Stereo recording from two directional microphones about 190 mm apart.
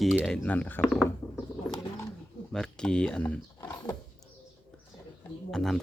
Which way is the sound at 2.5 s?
5° left (ahead or behind).